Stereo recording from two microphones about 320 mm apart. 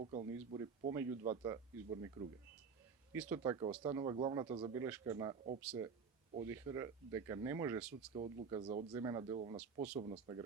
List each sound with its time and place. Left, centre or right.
0.0 s a man's voice: centre
8.1 s a man's voice: centre